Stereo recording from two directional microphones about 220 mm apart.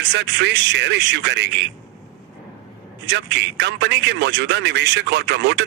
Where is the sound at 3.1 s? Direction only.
50° right (ahead or behind).